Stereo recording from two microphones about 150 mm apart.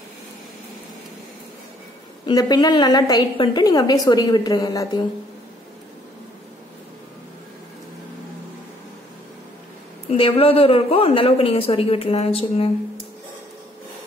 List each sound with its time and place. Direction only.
2.2 s a woman's voice: 30° left (ahead or behind)
10.0 s speech: 35° left (ahead or behind)